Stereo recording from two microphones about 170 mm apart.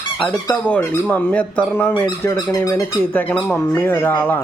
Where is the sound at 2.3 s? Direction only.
25° left (ahead or behind).